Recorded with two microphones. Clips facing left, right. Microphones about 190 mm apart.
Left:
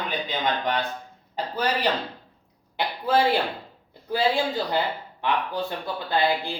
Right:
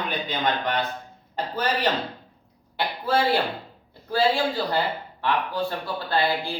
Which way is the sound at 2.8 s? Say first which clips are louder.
Left 1 dB; 20° left (ahead or behind).